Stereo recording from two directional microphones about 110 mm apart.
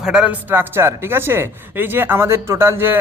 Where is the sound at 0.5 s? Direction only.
20° right (ahead or behind).